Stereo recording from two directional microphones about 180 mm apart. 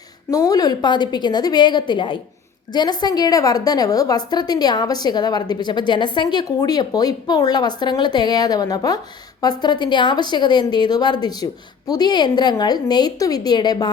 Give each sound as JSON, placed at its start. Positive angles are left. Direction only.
{"t": 0.3, "sound": "a woman's voice", "side_deg": 20}